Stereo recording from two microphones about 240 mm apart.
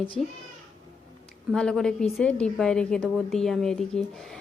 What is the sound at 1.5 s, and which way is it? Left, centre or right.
A woman's voice, centre.